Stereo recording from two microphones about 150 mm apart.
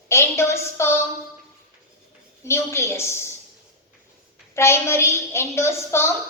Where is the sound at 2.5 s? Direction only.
15° left (ahead or behind).